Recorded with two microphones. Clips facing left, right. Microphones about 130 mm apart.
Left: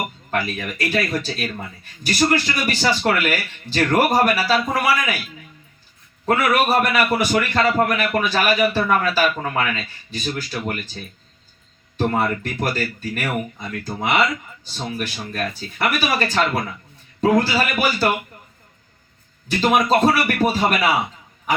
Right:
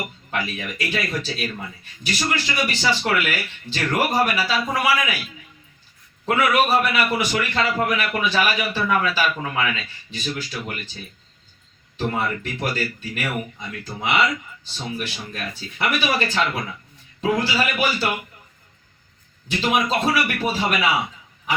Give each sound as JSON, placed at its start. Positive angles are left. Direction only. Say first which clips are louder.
{"t": 0.3, "sound": "a man's voice", "louder": "left 3 dB", "side_deg": 45}
{"t": 6.2, "sound": "a man's voice", "louder": "left 1 dB", "side_deg": 45}
{"t": 11.9, "sound": "a man's voice", "louder": "left 4 dB", "side_deg": 50}
{"t": 19.5, "sound": "a man's voice", "louder": "left 4 dB", "side_deg": 45}